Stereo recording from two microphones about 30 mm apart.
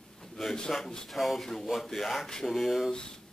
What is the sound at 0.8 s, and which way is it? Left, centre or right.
Speech, left.